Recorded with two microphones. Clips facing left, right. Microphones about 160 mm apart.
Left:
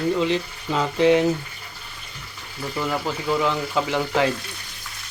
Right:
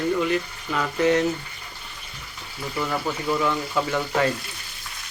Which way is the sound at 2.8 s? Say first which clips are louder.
Left 1 dB; 15° left (ahead or behind).